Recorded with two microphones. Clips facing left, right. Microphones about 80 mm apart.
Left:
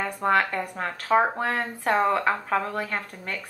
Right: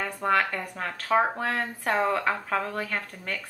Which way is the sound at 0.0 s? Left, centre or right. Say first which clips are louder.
Left 2 dB; left.